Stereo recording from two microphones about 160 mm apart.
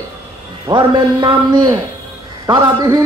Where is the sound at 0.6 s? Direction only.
30° right (ahead or behind).